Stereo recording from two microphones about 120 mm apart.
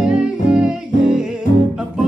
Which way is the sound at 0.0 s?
10° right (ahead or behind).